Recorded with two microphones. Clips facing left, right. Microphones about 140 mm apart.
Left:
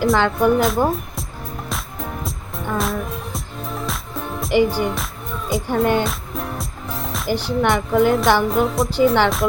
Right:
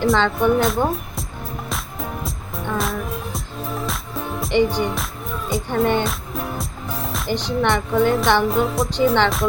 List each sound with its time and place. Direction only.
0.0 s a woman's voice: centre (ahead or behind)
1.7 s music: centre (ahead or behind)
5.6 s speech: 5° left (ahead or behind)